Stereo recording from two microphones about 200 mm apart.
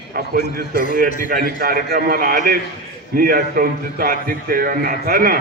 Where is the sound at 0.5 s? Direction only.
50° right (ahead or behind).